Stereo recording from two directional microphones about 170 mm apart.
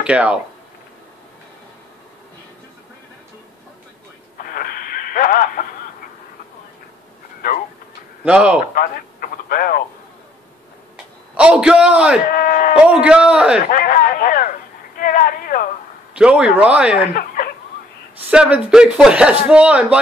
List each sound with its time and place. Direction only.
0.0 s speech: 5° right (ahead or behind)
4.4 s radio: 60° left (ahead or behind)
8.2 s speech: 5° right (ahead or behind)
8.7 s speech: 60° left (ahead or behind)
11.3 s speech: 5° right (ahead or behind)
12.3 s speech: 60° left (ahead or behind)
12.8 s speech: 5° right (ahead or behind)
13.7 s speech: 55° left (ahead or behind)
16.2 s speech: 5° right (ahead or behind)
17.1 s snicker: 60° left (ahead or behind)
18.3 s speech: 5° right (ahead or behind)